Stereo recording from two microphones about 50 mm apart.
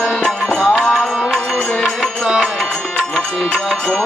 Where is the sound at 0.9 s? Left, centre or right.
Centre.